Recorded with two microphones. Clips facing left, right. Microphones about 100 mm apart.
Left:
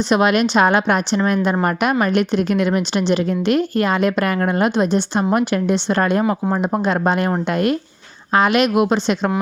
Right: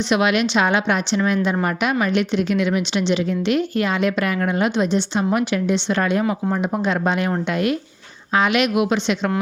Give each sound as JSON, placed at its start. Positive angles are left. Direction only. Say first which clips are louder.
{"t": 0.1, "sound": "a woman's voice", "louder": "left 3 dB", "side_deg": 40}